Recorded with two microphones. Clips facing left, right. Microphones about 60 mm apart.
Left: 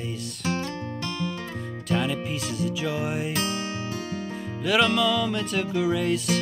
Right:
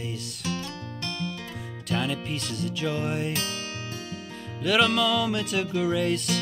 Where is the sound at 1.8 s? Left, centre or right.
Centre.